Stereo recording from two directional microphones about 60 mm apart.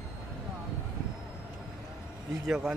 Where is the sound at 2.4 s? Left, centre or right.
Centre.